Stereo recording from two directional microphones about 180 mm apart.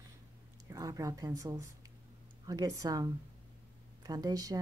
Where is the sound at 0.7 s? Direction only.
20° right (ahead or behind).